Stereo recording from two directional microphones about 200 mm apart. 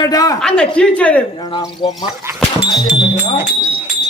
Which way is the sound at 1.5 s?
20° left (ahead or behind).